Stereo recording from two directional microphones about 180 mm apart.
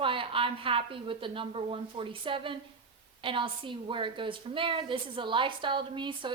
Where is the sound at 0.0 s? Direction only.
30° right (ahead or behind).